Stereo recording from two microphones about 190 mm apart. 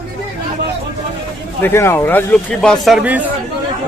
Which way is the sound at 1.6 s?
15° left (ahead or behind).